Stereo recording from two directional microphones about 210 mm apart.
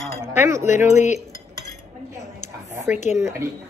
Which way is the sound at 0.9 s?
35° left (ahead or behind).